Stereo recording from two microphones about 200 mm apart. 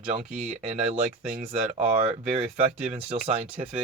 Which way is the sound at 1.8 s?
30° right (ahead or behind).